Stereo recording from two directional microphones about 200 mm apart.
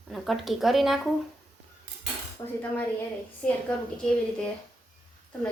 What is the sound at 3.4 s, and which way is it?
Speech, 5° left (ahead or behind).